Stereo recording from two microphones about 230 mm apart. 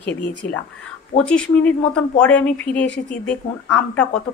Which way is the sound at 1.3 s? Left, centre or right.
Centre.